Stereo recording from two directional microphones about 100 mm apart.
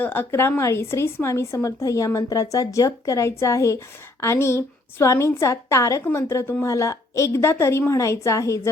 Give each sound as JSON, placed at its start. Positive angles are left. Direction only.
{"t": 0.0, "sound": "a woman's voice", "side_deg": 20}